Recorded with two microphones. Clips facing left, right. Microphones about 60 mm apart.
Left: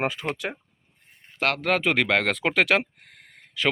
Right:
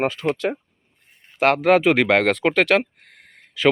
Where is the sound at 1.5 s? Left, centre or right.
Centre.